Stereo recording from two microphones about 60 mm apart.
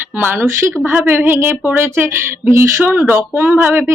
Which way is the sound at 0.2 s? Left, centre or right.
Right.